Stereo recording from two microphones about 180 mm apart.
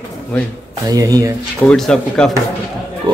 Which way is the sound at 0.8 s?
20° right (ahead or behind).